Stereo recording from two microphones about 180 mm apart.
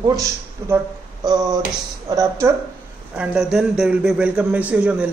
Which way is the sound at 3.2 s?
5° right (ahead or behind).